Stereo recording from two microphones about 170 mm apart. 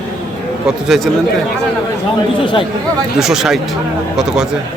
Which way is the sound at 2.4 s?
30° left (ahead or behind).